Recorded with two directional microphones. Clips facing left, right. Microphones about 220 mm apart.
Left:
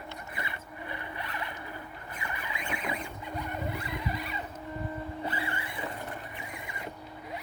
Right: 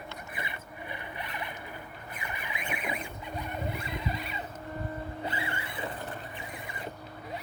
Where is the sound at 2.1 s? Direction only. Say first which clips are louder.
Left 1 dB; 20° right (ahead or behind).